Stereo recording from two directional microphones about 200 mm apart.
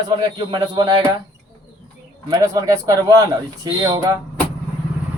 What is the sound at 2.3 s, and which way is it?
Speech, 15° right (ahead or behind).